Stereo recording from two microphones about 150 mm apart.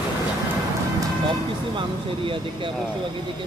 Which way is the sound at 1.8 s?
35° right (ahead or behind).